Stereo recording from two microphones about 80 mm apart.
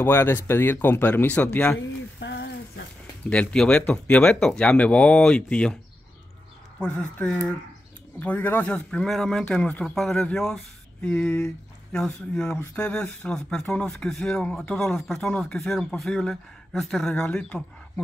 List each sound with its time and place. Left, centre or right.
0.0 s speech: left
3.3 s speech: centre
6.8 s speech: centre
8.2 s speech: left
11.9 s speech: centre